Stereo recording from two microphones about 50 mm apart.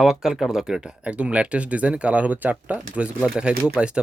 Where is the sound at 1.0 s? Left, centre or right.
Right.